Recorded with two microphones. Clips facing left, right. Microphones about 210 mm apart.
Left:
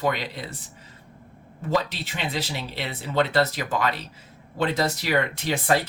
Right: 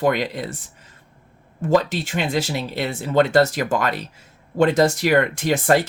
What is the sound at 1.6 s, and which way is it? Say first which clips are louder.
Speech: right 7 dB; 45° right (ahead or behind).